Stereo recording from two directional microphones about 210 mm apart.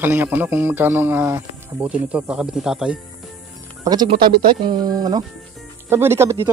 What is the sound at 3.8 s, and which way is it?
A man's voice, 20° right (ahead or behind).